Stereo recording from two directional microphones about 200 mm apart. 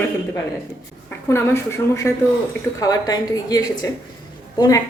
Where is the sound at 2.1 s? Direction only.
10° left (ahead or behind).